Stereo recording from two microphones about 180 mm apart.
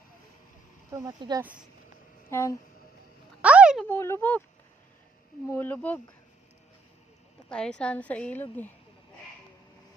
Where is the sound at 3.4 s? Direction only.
5° right (ahead or behind).